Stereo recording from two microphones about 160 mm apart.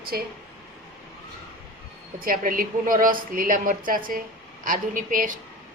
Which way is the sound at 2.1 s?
60° right (ahead or behind).